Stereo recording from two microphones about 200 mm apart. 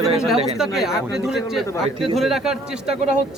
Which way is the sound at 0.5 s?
Centre (ahead or behind).